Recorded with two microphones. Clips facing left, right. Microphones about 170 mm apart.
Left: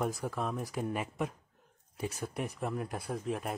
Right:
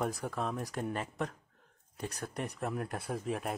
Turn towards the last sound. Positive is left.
turn(degrees=0)  # may be behind; listen again after turning